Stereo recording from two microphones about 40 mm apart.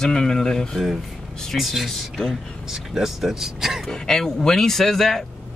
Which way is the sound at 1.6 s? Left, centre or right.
Centre.